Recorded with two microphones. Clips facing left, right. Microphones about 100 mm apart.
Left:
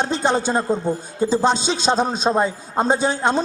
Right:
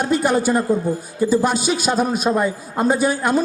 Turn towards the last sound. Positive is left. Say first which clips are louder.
# right 1 dB
turn(degrees=25)  # may be behind; listen again after turning